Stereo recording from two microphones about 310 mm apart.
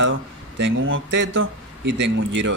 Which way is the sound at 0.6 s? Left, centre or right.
Right.